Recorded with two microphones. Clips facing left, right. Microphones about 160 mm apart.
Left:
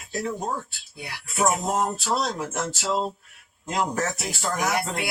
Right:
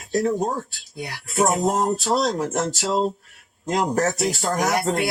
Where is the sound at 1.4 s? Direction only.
35° right (ahead or behind).